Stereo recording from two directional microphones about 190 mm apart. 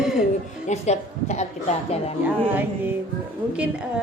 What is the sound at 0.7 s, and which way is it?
Speech, 35° left (ahead or behind).